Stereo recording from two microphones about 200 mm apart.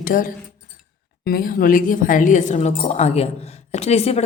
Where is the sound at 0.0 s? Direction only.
45° left (ahead or behind).